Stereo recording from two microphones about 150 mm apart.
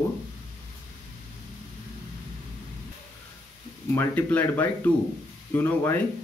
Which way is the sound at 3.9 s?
15° left (ahead or behind).